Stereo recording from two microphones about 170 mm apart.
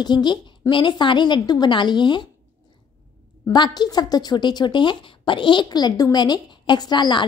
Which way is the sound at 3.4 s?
25° left (ahead or behind).